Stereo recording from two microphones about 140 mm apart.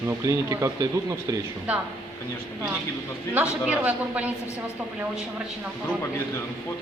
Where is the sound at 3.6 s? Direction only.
10° right (ahead or behind).